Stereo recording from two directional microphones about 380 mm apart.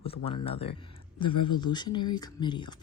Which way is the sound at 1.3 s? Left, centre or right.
Left.